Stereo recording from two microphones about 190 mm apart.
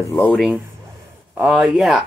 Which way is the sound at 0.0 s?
10° left (ahead or behind).